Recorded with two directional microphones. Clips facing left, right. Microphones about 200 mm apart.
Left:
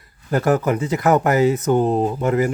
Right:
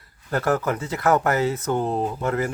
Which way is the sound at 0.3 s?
15° left (ahead or behind).